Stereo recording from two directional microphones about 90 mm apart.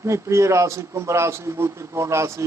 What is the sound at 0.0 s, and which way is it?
A man's voice, 35° right (ahead or behind).